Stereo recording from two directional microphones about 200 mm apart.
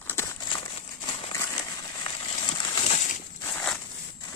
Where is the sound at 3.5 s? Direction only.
5° left (ahead or behind).